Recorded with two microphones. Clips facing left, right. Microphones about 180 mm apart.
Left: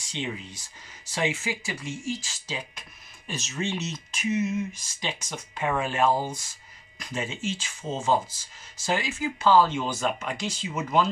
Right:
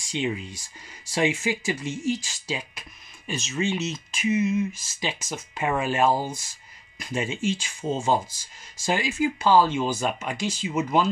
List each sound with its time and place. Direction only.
0.1 s speech: 10° right (ahead or behind)
3.3 s speech: centre (ahead or behind)